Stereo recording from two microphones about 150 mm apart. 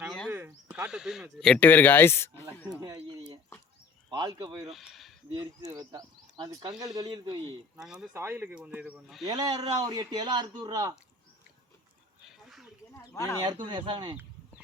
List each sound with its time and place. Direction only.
0.0 s a sound: 5° right (ahead or behind)
0.3 s speech: 10° right (ahead or behind); by 2.5 s 15° left (ahead or behind)
2.8 s a sound: 25° right (ahead or behind)
4.1 s speech: 25° right (ahead or behind)
4.7 s a sound: centre (ahead or behind)
5.3 s speech: 30° right (ahead or behind)
7.8 s speech: 5° right (ahead or behind)
8.1 s speech: 15° right (ahead or behind)
9.2 s speech: 30° right (ahead or behind)
12.5 s a sound: centre (ahead or behind)
13.1 s speech: 15° left (ahead or behind)
13.4 s speech: 30° right (ahead or behind)